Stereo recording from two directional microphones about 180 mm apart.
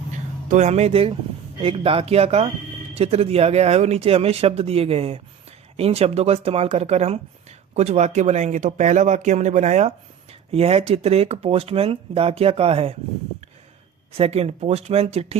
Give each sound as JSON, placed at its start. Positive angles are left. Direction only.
{"t": 0.1, "sound": "a sound", "side_deg": -40}
{"t": 1.6, "sound": "speech", "side_deg": -30}
{"t": 14.2, "sound": "speech", "side_deg": -35}